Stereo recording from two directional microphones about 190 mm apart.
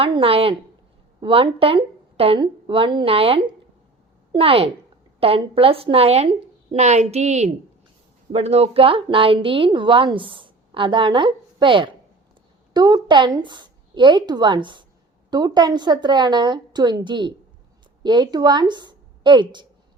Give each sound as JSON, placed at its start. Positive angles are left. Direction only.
{"t": 0.0, "sound": "a woman's voice", "side_deg": -30}